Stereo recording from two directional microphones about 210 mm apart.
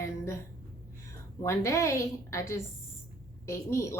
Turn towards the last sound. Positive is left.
turn(degrees=15)  # may be behind; listen again after turning